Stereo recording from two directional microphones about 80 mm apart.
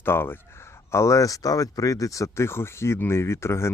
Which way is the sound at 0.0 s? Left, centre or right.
Left.